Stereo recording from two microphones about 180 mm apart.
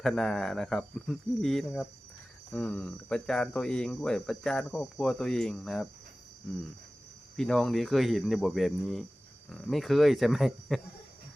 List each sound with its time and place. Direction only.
0.0 s speech: 5° left (ahead or behind)
7.3 s speech: 5° left (ahead or behind)